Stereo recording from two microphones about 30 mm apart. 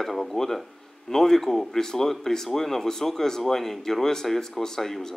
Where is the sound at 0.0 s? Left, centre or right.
Centre.